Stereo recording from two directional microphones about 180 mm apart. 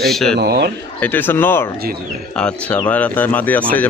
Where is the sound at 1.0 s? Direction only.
10° left (ahead or behind).